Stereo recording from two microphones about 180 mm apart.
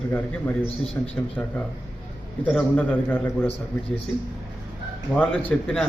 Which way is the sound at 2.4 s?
5° left (ahead or behind).